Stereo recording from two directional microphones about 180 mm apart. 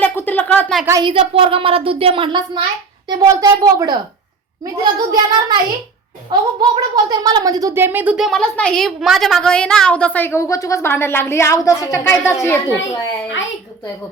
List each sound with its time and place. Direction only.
0.0 s a sound: 10° left (ahead or behind)
0.9 s a woman's voice: 20° right (ahead or behind)
1.1 s a woman's voice: 30° right (ahead or behind); by 13.0 s 15° left (ahead or behind)